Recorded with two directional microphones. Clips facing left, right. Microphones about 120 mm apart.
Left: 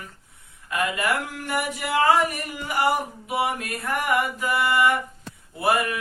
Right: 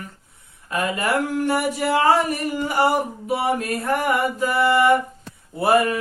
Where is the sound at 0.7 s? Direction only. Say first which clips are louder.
Right 3 dB; 30° right (ahead or behind).